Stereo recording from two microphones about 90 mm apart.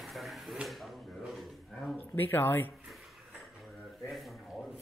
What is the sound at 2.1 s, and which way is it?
Speech, 20° left (ahead or behind).